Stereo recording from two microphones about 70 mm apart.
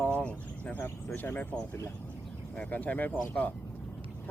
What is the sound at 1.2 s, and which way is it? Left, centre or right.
Speech, left.